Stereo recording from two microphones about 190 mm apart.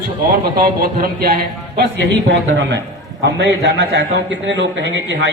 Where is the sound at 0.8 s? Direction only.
55° right (ahead or behind).